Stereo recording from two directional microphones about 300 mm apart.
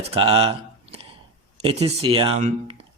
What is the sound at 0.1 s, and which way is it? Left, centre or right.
Speech, centre.